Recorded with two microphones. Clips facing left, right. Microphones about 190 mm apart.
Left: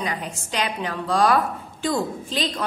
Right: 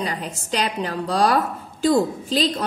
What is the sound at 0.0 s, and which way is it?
A woman's voice, 35° right (ahead or behind).